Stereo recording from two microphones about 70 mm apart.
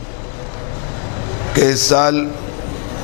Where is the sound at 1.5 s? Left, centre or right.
Centre.